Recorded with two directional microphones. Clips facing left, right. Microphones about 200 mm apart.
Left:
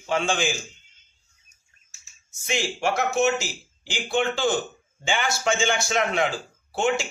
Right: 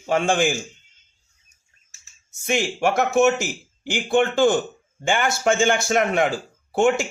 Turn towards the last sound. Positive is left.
turn(degrees=-50)  # may be behind; listen again after turning